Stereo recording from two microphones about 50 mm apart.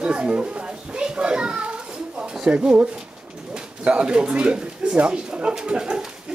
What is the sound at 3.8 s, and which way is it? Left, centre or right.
Speech, right.